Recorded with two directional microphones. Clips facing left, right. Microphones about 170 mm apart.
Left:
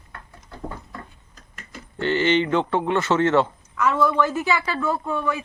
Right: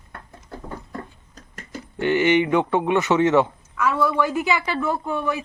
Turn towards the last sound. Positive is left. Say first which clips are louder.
# even
turn(degrees=-20)  # may be behind; listen again after turning